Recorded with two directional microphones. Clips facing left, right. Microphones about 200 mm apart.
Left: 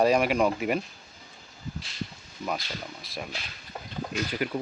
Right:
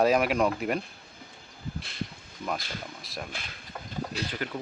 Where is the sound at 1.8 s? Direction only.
55° right (ahead or behind).